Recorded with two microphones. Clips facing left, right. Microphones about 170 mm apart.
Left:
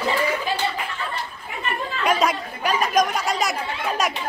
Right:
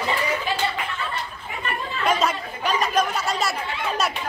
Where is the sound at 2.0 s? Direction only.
10° left (ahead or behind).